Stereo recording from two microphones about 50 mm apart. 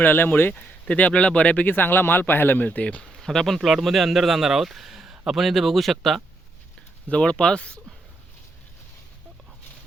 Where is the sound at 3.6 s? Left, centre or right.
Centre.